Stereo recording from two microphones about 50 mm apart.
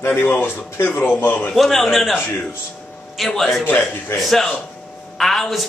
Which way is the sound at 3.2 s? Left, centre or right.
Centre.